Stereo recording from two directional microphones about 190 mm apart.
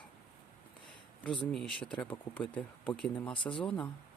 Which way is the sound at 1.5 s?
5° left (ahead or behind).